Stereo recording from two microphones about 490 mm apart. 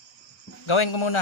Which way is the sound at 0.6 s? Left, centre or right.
Left.